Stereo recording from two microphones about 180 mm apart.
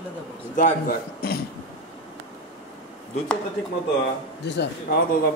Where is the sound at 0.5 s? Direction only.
50° left (ahead or behind).